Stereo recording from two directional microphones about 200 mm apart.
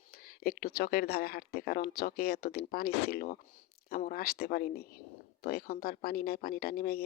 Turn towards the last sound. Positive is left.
turn(degrees=50)  # may be behind; listen again after turning